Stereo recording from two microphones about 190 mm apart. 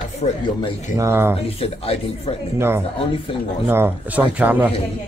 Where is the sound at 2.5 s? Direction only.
15° right (ahead or behind).